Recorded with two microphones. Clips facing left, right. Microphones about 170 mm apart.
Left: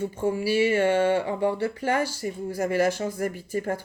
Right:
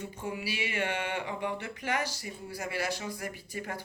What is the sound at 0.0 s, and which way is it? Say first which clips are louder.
Speech: left 11 dB; 40° left (ahead or behind).